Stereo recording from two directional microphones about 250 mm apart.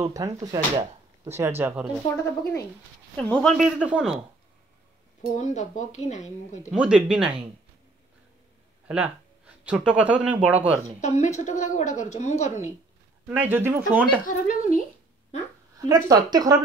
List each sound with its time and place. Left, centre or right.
0.0 s speech: centre
3.2 s speech: centre
5.3 s a woman's voice: left
6.7 s speech: centre
8.8 s speech: centre
11.0 s a woman's voice: left
13.3 s speech: centre
14.2 s speech: left
16.1 s speech: centre